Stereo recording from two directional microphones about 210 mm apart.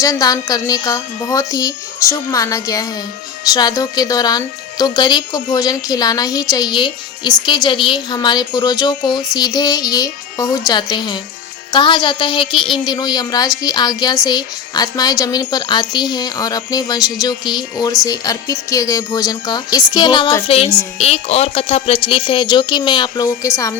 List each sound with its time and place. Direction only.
0.0 s a woman's voice: 15° left (ahead or behind)